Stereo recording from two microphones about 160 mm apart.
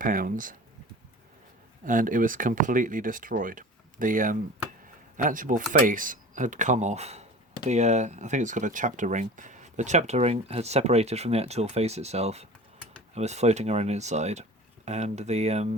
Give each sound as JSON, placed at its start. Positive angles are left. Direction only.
{"t": 0.0, "sound": "speech", "side_deg": -60}
{"t": 1.8, "sound": "speech", "side_deg": -55}